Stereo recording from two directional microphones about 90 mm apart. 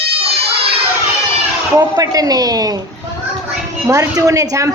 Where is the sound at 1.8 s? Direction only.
40° right (ahead or behind).